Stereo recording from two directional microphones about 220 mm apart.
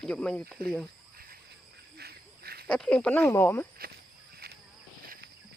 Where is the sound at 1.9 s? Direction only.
45° right (ahead or behind).